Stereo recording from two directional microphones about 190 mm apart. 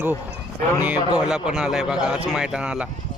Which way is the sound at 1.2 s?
5° right (ahead or behind).